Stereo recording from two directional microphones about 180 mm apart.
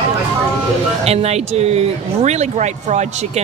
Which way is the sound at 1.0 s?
35° right (ahead or behind).